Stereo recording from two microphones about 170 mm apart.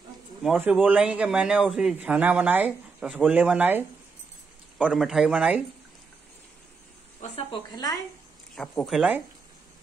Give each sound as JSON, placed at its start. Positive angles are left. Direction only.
{"t": 0.6, "sound": "a man's voice", "side_deg": -10}
{"t": 7.2, "sound": "speech", "side_deg": 35}
{"t": 7.7, "sound": "speech", "side_deg": 20}
{"t": 8.5, "sound": "speech", "side_deg": 0}